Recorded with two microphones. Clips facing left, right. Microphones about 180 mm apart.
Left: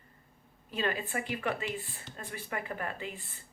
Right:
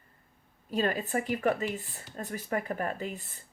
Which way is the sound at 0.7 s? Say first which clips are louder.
Right 4 dB; 40° right (ahead or behind).